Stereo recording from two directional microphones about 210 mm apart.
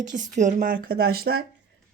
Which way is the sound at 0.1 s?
35° right (ahead or behind).